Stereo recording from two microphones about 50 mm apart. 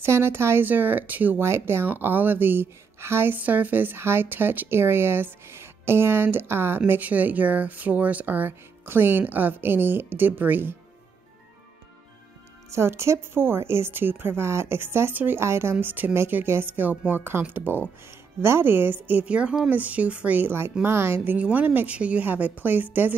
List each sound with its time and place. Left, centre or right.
0.0 s a woman's voice: right
0.7 s speech: right
1.4 s a woman's voice: right
1.9 s speech: right
3.3 s speech: right
6.9 s speech: right
12.7 s a woman's voice: right
15.8 s speech: right
16.4 s speech: right
16.7 s speech: right
19.2 s a woman's voice: right
20.4 s a woman's voice: right
21.2 s a woman's voice: right
22.2 s speech: right